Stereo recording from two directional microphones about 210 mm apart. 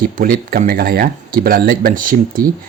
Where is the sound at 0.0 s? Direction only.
45° right (ahead or behind).